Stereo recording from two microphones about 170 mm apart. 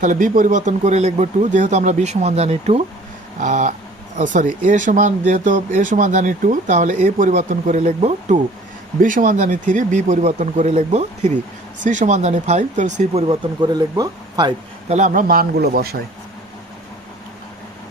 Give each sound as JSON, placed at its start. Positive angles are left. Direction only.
{"t": 0.0, "sound": "speech", "side_deg": -50}
{"t": 14.8, "sound": "speech", "side_deg": -45}